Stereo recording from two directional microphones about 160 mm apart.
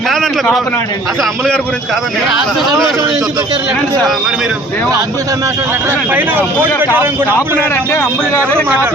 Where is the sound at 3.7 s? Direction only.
Centre (ahead or behind).